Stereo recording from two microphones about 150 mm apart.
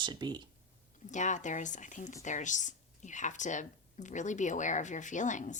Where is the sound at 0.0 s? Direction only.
30° right (ahead or behind).